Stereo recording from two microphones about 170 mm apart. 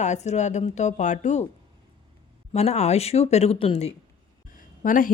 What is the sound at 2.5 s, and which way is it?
Speech, 40° left (ahead or behind).